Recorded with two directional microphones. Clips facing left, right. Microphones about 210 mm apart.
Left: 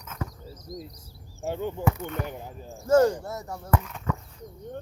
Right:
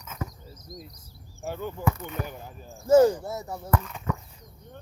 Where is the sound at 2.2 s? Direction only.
20° left (ahead or behind).